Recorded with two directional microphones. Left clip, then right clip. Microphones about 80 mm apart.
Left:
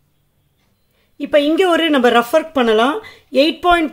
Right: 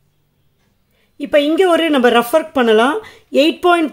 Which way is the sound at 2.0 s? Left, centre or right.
Centre.